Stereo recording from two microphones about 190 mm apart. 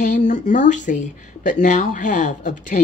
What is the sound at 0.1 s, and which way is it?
Speech, 40° left (ahead or behind).